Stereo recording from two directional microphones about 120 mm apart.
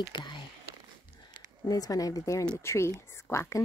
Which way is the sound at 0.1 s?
40° left (ahead or behind).